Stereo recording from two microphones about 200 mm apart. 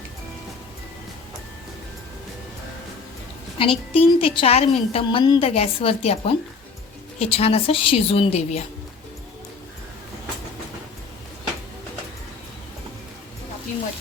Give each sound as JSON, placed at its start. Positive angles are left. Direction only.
{"t": 3.6, "sound": "a woman's voice", "side_deg": 25}